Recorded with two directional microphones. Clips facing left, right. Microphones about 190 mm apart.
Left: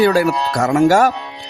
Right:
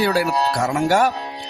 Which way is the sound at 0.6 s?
65° left (ahead or behind).